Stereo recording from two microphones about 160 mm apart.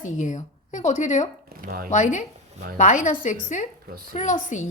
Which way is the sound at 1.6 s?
65° right (ahead or behind).